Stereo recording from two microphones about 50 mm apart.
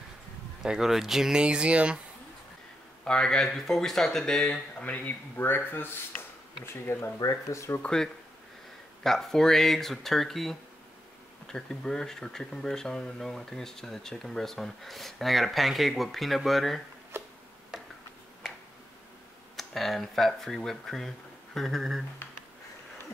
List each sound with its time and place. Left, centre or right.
0.6 s speech: centre
3.1 s speech: centre
4.5 s speech: left
4.9 s speech: left
6.6 s speech: left
7.8 s speech: centre
17.1 s tick-tock: right
19.5 s speech: centre